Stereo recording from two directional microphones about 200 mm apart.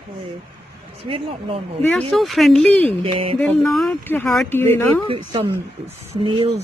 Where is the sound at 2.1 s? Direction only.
Centre (ahead or behind).